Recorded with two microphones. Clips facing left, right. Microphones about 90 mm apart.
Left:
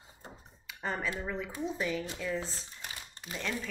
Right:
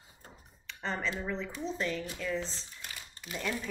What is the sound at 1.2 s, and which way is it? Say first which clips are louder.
Speech: even; 10° left (ahead or behind).